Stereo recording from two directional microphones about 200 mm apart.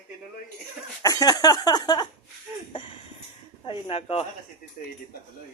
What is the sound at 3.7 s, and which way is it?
Speech, 30° left (ahead or behind).